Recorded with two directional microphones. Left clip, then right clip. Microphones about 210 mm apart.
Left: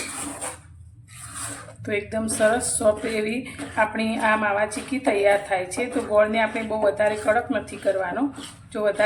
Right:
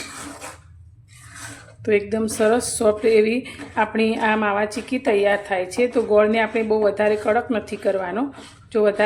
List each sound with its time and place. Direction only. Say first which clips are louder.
1.8 s speech: right 6 dB; 40° right (ahead or behind)
8.7 s speech: right 4 dB; 45° right (ahead or behind)